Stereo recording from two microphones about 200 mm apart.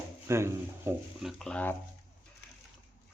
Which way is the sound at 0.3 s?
15° right (ahead or behind).